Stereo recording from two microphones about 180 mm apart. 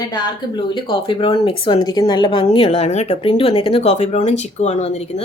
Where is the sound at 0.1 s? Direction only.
25° left (ahead or behind).